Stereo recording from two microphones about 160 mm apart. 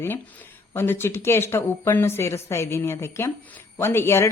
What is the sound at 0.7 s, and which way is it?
A woman's voice, 15° left (ahead or behind).